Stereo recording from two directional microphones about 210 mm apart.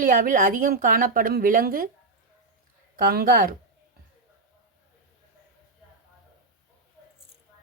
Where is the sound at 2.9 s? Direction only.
45° right (ahead or behind).